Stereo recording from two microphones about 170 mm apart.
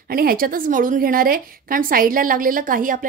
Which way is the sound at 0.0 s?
60° right (ahead or behind).